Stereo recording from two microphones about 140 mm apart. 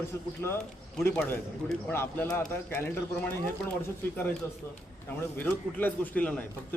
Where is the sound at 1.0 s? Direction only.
10° left (ahead or behind).